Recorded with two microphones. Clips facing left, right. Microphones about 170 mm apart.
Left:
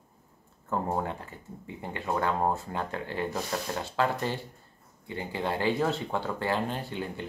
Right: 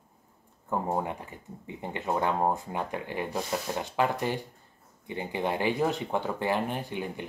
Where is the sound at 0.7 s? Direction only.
15° right (ahead or behind).